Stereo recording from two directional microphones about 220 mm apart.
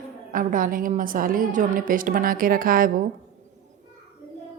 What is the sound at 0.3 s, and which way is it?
A woman's voice, 40° right (ahead or behind).